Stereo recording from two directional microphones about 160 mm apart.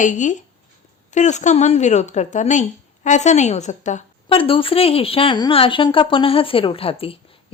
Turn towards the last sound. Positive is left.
turn(degrees=35)  # may be behind; listen again after turning